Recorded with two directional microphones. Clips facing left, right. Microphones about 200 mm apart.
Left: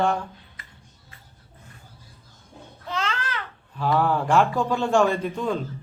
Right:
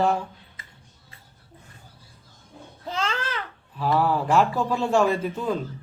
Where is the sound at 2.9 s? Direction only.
35° right (ahead or behind).